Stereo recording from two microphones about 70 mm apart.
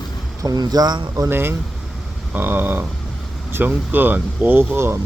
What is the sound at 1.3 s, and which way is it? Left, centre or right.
Speech, right.